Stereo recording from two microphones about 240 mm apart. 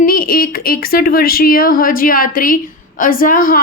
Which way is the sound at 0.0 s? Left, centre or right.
Left.